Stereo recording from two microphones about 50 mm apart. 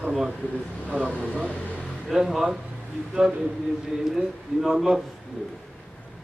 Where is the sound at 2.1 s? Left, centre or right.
Centre.